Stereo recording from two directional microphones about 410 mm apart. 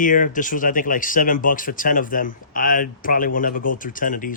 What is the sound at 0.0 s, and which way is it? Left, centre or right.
Speech, centre.